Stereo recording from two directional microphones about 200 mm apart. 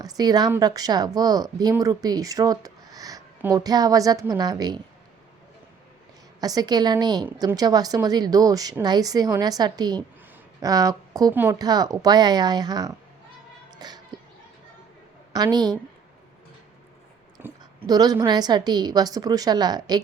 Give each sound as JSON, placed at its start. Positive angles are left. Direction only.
{"t": 0.0, "sound": "speech", "side_deg": -20}
{"t": 6.4, "sound": "speech", "side_deg": -20}
{"t": 13.7, "sound": "a sound", "side_deg": -20}
{"t": 15.3, "sound": "a woman's voice", "side_deg": -20}
{"t": 17.4, "sound": "speech", "side_deg": -15}